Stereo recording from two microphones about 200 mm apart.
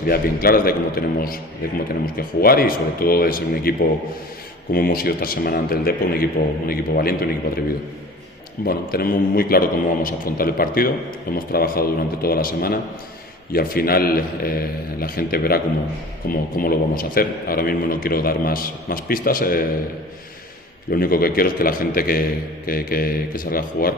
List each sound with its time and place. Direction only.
0.1 s a man's voice: 45° left (ahead or behind)
8.6 s a man's voice: 50° left (ahead or behind)
20.9 s a man's voice: 45° left (ahead or behind)